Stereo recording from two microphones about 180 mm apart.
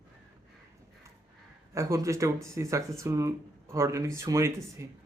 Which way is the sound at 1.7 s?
15° right (ahead or behind).